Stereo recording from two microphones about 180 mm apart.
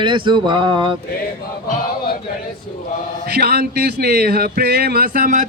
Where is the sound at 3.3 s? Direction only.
60° right (ahead or behind).